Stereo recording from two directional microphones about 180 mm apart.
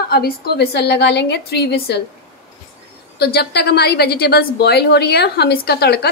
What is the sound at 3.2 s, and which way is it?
A woman's voice, 60° left (ahead or behind).